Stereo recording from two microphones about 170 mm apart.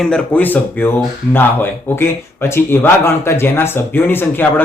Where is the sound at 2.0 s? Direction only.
15° left (ahead or behind).